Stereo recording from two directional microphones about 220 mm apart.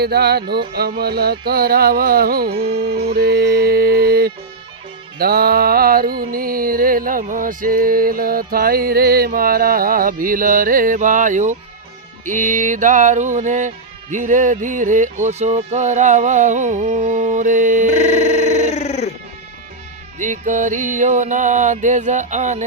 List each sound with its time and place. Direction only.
0.0 s music: 45° right (ahead or behind)
18.2 s a sound: 30° left (ahead or behind)
20.1 s music: 35° right (ahead or behind)